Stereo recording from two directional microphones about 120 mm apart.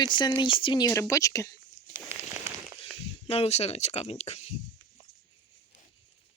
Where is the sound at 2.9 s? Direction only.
55° left (ahead or behind).